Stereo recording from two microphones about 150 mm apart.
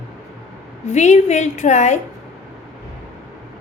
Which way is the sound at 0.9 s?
50° left (ahead or behind).